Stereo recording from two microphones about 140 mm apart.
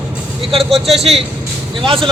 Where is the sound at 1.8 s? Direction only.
40° right (ahead or behind).